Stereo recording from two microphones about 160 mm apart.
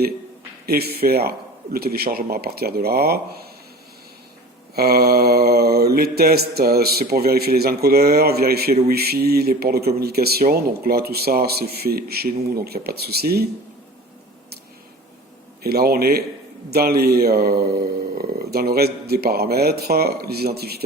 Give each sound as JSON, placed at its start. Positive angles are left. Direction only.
{"t": 0.7, "sound": "mantra", "side_deg": -75}
{"t": 4.7, "sound": "mantra", "side_deg": -75}
{"t": 15.6, "sound": "mantra", "side_deg": -75}